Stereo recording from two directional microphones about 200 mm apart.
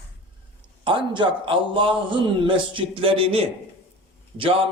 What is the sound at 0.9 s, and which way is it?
A man's voice, 25° right (ahead or behind).